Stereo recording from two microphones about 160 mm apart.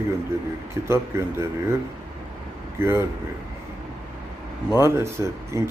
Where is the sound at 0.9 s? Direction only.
15° right (ahead or behind).